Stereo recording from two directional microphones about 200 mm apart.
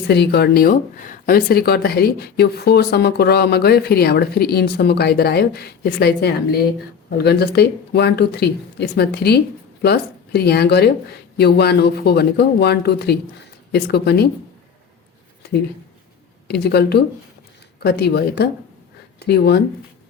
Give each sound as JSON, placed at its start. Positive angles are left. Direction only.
{"t": 0.1, "sound": "speech", "side_deg": 55}
{"t": 16.5, "sound": "speech", "side_deg": 55}